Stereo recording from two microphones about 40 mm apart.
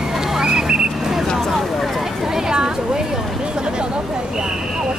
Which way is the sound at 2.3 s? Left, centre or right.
Centre.